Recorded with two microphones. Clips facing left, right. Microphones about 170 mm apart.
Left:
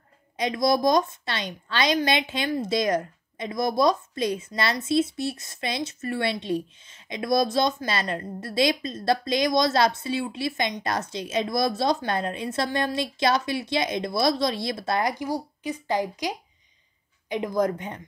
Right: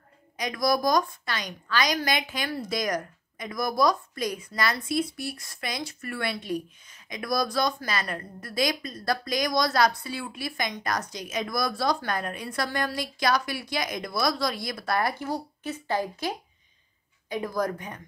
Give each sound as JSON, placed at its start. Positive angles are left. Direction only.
{"t": 0.4, "sound": "speech", "side_deg": 25}